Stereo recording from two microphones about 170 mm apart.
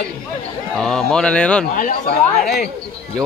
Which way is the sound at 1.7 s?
55° left (ahead or behind).